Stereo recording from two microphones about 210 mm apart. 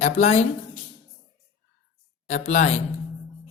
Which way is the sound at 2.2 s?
35° left (ahead or behind).